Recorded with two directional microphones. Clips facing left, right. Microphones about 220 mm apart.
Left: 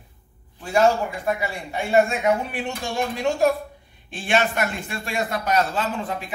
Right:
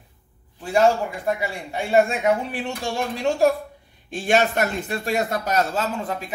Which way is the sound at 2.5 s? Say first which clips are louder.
Even; 35° right (ahead or behind).